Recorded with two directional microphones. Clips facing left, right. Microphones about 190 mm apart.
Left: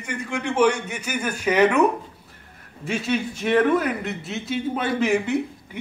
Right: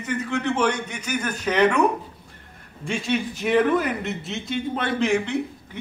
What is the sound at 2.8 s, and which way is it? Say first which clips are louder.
A man's voice: even; 5° left (ahead or behind).